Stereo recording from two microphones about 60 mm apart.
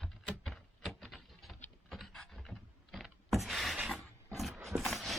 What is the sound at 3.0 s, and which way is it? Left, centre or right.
Power windows, centre.